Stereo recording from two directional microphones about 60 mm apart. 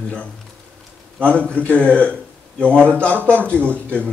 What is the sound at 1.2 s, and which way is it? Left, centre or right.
A man's voice, left.